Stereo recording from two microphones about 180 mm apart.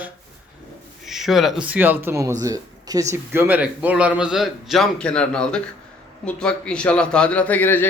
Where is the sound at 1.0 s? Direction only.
Centre (ahead or behind).